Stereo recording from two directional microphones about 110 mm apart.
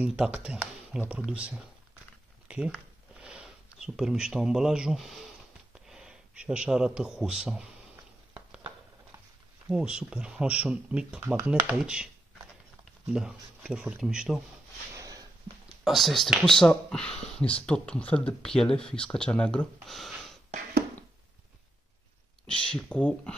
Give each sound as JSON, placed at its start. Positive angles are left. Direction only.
{"t": 0.0, "sound": "speech", "side_deg": -10}
{"t": 2.4, "sound": "a sound", "side_deg": -10}
{"t": 7.0, "sound": "speech", "side_deg": -5}
{"t": 7.9, "sound": "a sound", "side_deg": -10}
{"t": 9.7, "sound": "speech", "side_deg": -5}
{"t": 13.1, "sound": "speech", "side_deg": -5}
{"t": 15.0, "sound": "sniff", "side_deg": -35}
{"t": 15.8, "sound": "speech", "side_deg": 0}
{"t": 22.5, "sound": "speech", "side_deg": 10}